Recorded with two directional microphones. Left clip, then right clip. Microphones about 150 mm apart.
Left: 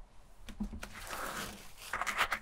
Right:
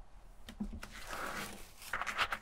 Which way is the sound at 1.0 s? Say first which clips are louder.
Left 1 dB; 20° left (ahead or behind).